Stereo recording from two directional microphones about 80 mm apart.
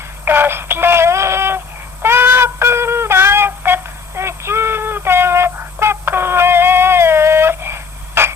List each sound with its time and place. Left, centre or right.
0.3 s synthetic singing: right